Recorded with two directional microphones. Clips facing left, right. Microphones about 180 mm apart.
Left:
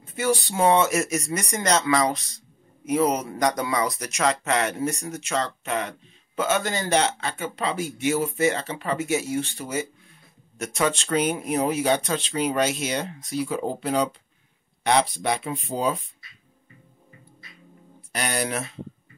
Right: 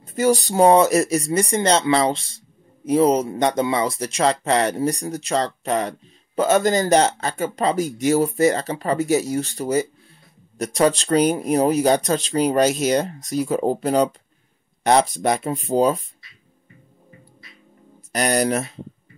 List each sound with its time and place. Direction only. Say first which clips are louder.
0.0 s speech: right 6 dB; 40° right (ahead or behind)
18.1 s speech: right 7 dB; 40° right (ahead or behind)